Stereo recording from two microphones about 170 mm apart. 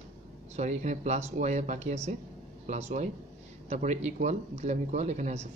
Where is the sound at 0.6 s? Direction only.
45° right (ahead or behind).